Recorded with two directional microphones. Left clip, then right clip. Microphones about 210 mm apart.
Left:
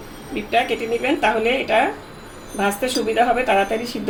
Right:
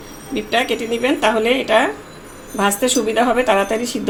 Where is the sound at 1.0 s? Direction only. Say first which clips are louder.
Right 3 dB; 45° right (ahead or behind).